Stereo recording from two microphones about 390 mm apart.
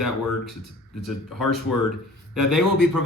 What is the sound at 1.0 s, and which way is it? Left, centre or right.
Speech, centre.